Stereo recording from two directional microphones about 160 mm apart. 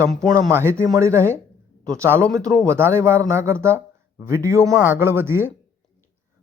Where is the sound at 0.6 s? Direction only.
20° right (ahead or behind).